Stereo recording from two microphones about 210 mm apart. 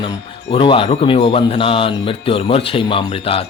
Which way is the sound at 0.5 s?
25° left (ahead or behind).